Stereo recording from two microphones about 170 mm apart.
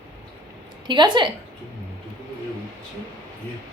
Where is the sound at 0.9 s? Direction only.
25° right (ahead or behind).